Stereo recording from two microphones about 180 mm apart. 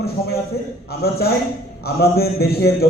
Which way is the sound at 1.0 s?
60° left (ahead or behind).